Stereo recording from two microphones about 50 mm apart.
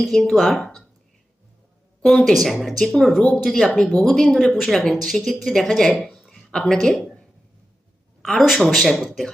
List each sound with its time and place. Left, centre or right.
0.0 s speech: centre
2.0 s speech: centre
6.1 s a sound: centre
8.4 s speech: centre